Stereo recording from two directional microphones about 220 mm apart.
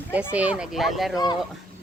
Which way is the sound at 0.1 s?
5° right (ahead or behind).